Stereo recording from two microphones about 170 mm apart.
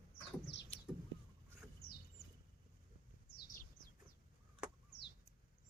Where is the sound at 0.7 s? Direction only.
35° left (ahead or behind).